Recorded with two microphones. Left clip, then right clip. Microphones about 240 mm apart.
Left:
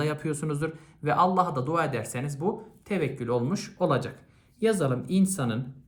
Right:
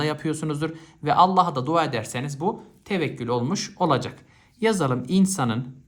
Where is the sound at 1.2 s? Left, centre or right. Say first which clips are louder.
Right 6 dB; centre.